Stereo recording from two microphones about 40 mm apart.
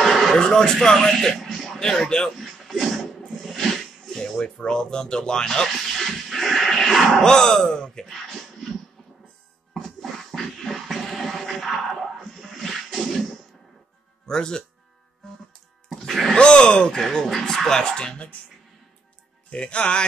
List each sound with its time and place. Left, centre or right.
0.0 s a sound: centre
0.4 s speech: centre
1.8 s speech: centre
2.3 s music: centre
3.3 s a sound: centre
4.4 s speech: centre
8.1 s a sound: centre
9.8 s a sound: centre
14.2 s speech: centre
15.9 s music: centre
16.3 s speech: left
17.3 s speech: centre
17.6 s speech: centre
19.5 s speech: left